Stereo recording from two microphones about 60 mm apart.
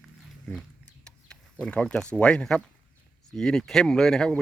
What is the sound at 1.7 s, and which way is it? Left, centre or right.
Speech, left.